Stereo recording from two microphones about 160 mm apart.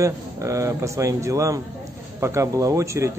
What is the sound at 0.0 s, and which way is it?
A man's voice, 20° right (ahead or behind).